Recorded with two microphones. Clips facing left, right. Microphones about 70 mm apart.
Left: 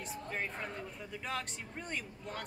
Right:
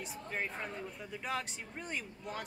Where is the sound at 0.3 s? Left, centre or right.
Centre.